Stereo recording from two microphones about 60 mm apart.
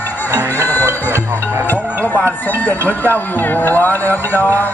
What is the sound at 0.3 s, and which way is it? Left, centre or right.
Music, left.